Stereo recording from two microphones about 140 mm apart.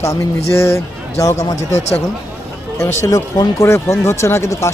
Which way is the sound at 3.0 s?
25° left (ahead or behind).